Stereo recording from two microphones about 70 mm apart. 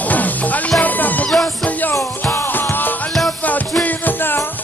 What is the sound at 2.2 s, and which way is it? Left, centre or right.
Music, left.